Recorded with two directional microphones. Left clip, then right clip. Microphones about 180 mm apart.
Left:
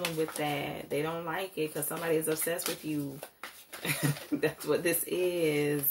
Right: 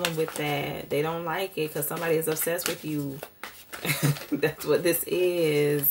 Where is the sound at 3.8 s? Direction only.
20° right (ahead or behind).